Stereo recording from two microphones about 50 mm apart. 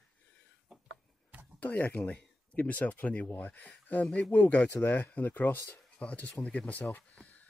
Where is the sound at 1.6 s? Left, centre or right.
Left.